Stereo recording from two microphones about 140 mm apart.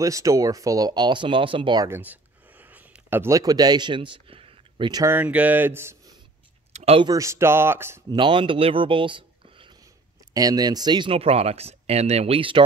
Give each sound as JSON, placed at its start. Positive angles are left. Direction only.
{"t": 0.0, "sound": "speech", "side_deg": -25}
{"t": 1.9, "sound": "a sound", "side_deg": -10}
{"t": 5.0, "sound": "speech", "side_deg": -15}
{"t": 6.7, "sound": "a sound", "side_deg": -50}
{"t": 7.0, "sound": "speech", "side_deg": -25}
{"t": 8.1, "sound": "speech", "side_deg": -35}
{"t": 10.3, "sound": "speech", "side_deg": -25}